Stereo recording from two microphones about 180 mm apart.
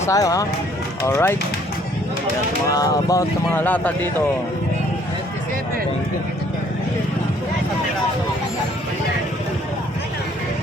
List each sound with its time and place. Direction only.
0.0 s speech: 20° left (ahead or behind)
2.6 s speech: 20° left (ahead or behind)